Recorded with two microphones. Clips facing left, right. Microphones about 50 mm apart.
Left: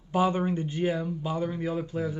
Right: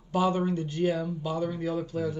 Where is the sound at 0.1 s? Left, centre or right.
Left.